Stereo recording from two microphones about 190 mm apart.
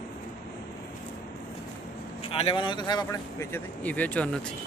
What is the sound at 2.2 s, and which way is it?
Speech, 30° left (ahead or behind).